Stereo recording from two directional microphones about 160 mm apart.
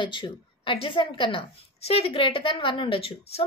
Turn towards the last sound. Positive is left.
turn(degrees=35)  # may be behind; listen again after turning